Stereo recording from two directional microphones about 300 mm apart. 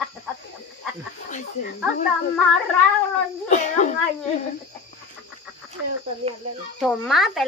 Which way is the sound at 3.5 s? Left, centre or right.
Left.